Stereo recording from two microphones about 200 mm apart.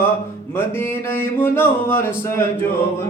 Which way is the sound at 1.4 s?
10° left (ahead or behind).